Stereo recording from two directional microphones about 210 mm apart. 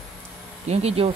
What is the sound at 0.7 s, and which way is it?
Speech, 30° right (ahead or behind).